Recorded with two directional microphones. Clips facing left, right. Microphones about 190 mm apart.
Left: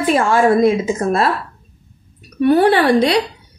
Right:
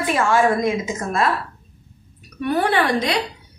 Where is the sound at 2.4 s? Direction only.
30° left (ahead or behind).